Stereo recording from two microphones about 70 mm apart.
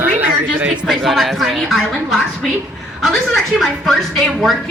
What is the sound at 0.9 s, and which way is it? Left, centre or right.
Speech, centre.